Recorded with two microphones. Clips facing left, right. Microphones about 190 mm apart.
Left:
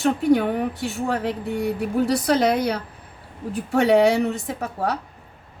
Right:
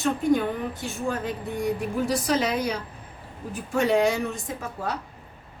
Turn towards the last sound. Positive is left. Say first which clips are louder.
# left 5 dB
turn(degrees=70)  # may be behind; listen again after turning